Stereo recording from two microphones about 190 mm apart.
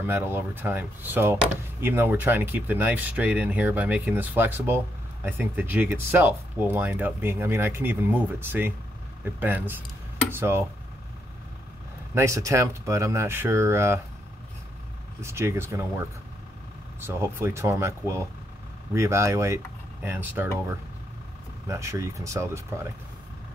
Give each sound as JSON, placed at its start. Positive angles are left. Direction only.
{"t": 0.0, "sound": "speech", "side_deg": -10}
{"t": 12.1, "sound": "speech", "side_deg": -15}
{"t": 15.2, "sound": "speech", "side_deg": -15}
{"t": 17.0, "sound": "speech", "side_deg": -10}